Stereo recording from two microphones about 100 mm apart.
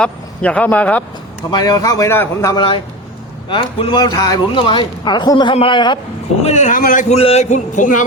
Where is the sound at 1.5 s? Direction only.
40° left (ahead or behind); by 2.6 s 25° left (ahead or behind).